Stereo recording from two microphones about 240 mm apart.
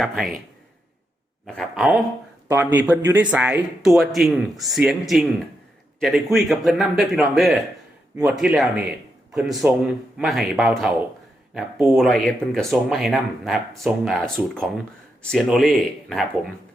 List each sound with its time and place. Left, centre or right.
0.0 s speech: centre
1.5 s speech: centre
11.9 s speech: centre